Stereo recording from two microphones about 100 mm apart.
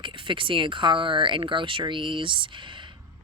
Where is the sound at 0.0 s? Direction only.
55° right (ahead or behind).